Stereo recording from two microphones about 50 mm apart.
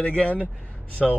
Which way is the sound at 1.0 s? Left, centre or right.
Centre.